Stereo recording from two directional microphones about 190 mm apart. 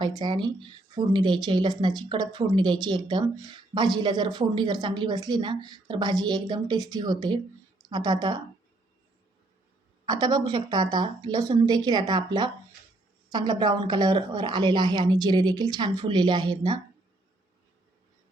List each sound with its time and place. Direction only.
0.2 s speech: 25° right (ahead or behind)
10.1 s speech: 20° right (ahead or behind)